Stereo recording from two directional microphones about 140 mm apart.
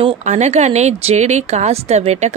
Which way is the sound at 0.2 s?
55° right (ahead or behind).